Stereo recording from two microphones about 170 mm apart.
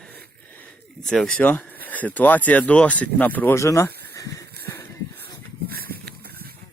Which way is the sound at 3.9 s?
70° right (ahead or behind).